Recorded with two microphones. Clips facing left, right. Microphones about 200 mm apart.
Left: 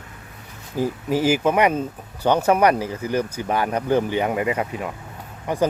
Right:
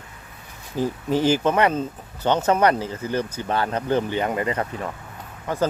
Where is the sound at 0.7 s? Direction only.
10° left (ahead or behind).